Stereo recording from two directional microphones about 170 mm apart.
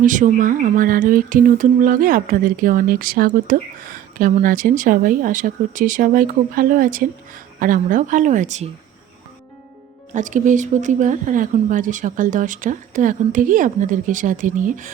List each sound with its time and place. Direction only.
0.0 s speech: 50° right (ahead or behind)
10.1 s speech: 45° right (ahead or behind)